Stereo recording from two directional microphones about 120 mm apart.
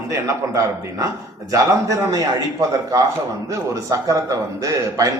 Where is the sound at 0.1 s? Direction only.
25° right (ahead or behind).